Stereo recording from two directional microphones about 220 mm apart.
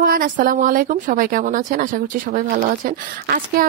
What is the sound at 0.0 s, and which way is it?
Speech, 40° right (ahead or behind).